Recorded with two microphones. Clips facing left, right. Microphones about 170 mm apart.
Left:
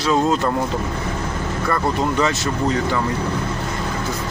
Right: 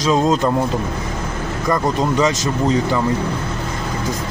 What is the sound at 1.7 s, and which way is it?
Speech, 15° right (ahead or behind).